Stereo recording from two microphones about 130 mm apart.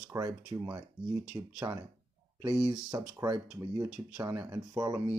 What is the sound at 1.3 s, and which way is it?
Speech, 35° right (ahead or behind).